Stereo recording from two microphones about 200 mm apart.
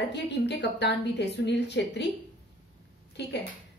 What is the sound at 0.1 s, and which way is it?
Speech, 60° left (ahead or behind).